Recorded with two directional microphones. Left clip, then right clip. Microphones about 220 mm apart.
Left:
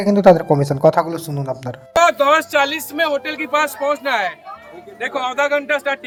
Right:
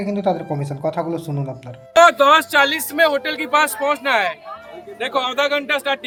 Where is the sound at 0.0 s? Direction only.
30° left (ahead or behind).